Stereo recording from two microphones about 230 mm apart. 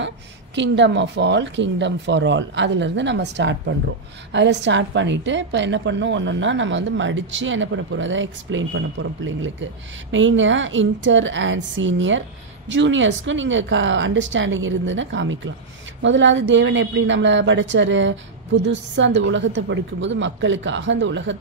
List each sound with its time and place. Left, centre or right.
0.6 s a woman's voice: right